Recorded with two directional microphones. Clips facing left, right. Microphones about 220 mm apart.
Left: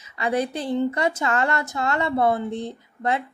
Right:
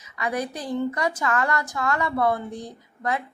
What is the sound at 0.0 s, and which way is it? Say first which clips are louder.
A woman's voice: left 4 dB; 30° left (ahead or behind).